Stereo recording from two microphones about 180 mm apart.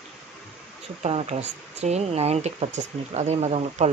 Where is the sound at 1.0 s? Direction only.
35° right (ahead or behind).